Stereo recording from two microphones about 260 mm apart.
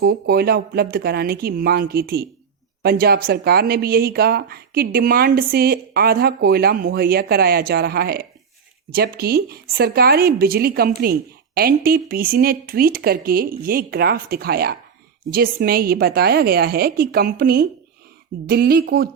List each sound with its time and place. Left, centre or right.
0.0 s speech: right